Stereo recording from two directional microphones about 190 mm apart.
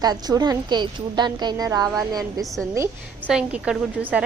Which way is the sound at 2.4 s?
Centre (ahead or behind).